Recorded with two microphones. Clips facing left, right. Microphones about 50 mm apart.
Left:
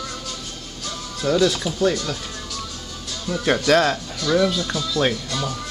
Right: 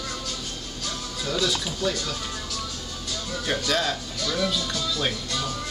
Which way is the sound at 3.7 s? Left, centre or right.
Left.